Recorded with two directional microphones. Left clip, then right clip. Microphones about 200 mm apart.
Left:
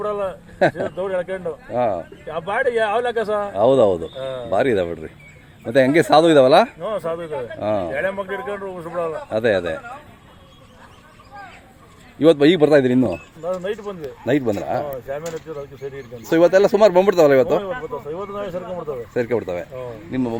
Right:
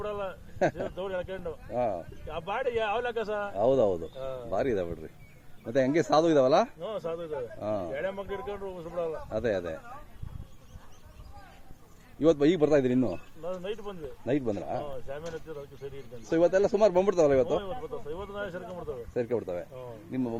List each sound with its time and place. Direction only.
0.0 s speech: 5° right (ahead or behind)
6.9 s speech: 30° right (ahead or behind)
7.6 s speech: centre (ahead or behind)
7.9 s speech: 45° right (ahead or behind)
9.3 s speech: centre (ahead or behind)
12.2 s speech: centre (ahead or behind)
16.3 s speech: centre (ahead or behind)